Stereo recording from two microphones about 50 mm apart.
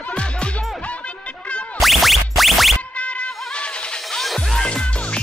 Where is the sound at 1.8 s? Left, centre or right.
Centre.